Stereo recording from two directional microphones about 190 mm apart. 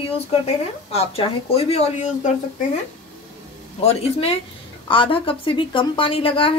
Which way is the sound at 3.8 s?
35° left (ahead or behind).